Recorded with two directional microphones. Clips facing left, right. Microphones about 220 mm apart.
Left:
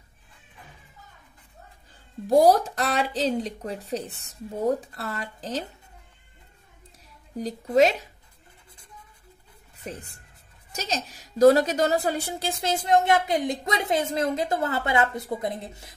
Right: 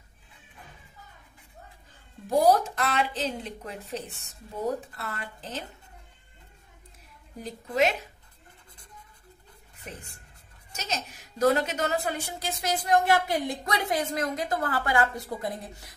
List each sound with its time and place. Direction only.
2.4 s speech: 35° left (ahead or behind)
7.4 s speech: 35° left (ahead or behind)
10.7 s a woman's voice: 35° left (ahead or behind)